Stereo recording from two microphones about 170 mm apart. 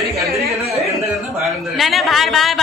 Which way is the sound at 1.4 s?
Centre (ahead or behind).